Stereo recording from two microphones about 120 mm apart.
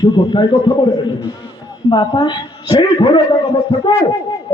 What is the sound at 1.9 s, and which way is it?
Music, 35° left (ahead or behind).